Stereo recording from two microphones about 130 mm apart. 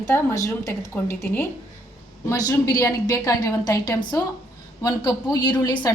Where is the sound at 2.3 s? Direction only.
30° left (ahead or behind).